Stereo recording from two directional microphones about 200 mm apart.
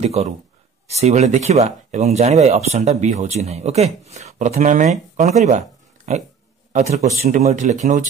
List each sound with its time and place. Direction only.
0.0 s speech: 30° right (ahead or behind)